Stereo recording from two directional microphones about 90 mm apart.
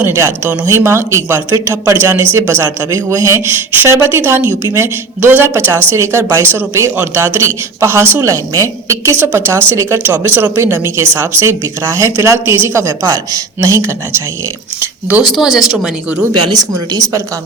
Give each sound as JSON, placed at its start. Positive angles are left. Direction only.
{"t": 0.0, "sound": "a woman's voice", "side_deg": -30}
{"t": 15.4, "sound": "speech", "side_deg": -5}
{"t": 16.5, "sound": "a woman's voice", "side_deg": -40}